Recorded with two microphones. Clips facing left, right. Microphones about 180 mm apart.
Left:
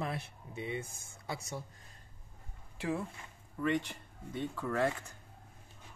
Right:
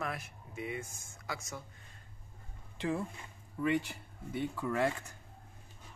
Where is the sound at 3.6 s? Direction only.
10° right (ahead or behind).